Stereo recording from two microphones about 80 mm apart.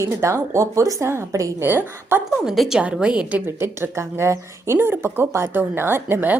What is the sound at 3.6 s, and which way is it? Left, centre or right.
A woman's voice, right.